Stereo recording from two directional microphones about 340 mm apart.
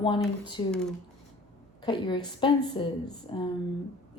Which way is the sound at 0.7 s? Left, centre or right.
Centre.